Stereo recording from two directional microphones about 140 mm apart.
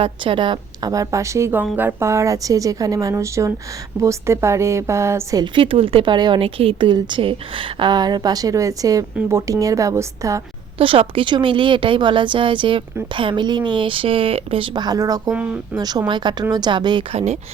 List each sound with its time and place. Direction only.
0.0 s a woman's voice: 40° right (ahead or behind); by 5.5 s 20° right (ahead or behind)
5.5 s a woman's voice: 40° right (ahead or behind); by 10.4 s 20° right (ahead or behind)
10.8 s a woman's voice: 40° right (ahead or behind)